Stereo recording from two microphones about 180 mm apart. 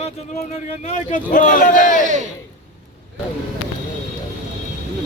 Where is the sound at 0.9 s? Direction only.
45° left (ahead or behind).